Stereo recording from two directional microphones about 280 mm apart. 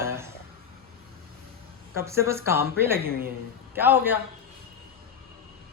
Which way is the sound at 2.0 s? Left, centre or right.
Centre.